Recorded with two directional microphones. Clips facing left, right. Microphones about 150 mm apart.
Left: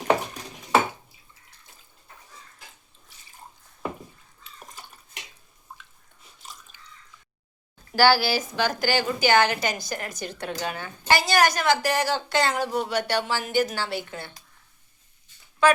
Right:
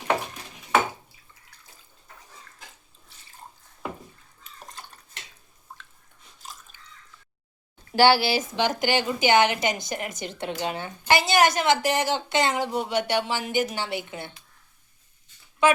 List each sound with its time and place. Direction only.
4.7 s dishes: 10° left (ahead or behind)
7.9 s a woman's voice: 25° right (ahead or behind)
15.6 s a woman's voice: 20° right (ahead or behind)